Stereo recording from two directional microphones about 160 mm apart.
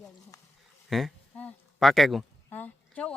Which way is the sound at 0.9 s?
Centre (ahead or behind).